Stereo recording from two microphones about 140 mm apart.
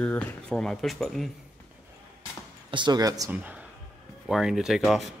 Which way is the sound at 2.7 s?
30° right (ahead or behind).